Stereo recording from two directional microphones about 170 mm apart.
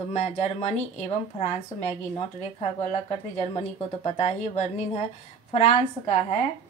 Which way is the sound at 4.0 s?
40° left (ahead or behind).